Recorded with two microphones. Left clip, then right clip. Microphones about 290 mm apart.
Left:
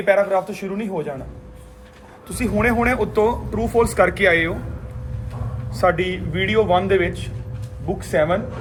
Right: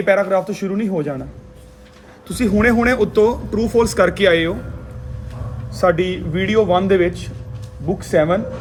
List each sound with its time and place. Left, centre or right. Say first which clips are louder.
0.0 s speech: right 2 dB; right
2.5 s speech: right 3 dB; right
5.8 s speech: right 2 dB; right